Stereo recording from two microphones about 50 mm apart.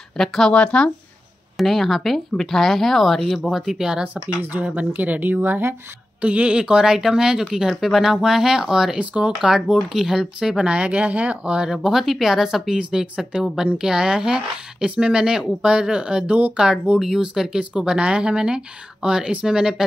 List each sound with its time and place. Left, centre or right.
0.2 s speech: centre
0.5 s speech: left
1.6 s speech: centre
4.4 s speech: right
6.2 s speech: right
8.9 s speech: right
9.4 s speech: centre
10.5 s speech: right
11.6 s speech: centre
12.7 s speech: right
17.7 s speech: centre